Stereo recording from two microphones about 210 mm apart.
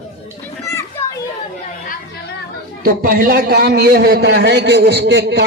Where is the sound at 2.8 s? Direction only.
45° right (ahead or behind).